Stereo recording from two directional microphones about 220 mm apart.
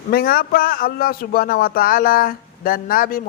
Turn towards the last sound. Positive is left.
turn(degrees=40)  # may be behind; listen again after turning